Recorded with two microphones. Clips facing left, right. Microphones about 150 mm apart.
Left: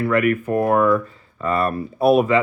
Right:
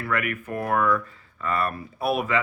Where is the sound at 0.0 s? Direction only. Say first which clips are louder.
Left 10 dB; 30° left (ahead or behind).